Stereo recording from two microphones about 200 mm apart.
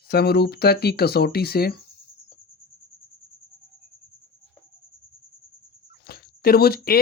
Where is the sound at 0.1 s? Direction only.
50° left (ahead or behind).